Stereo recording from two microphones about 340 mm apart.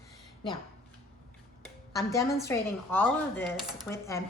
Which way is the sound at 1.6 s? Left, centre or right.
Centre.